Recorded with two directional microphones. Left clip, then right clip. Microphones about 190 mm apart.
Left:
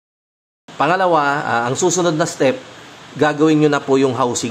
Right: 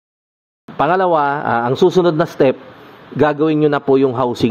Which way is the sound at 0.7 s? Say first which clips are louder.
Right 1 dB; 40° right (ahead or behind).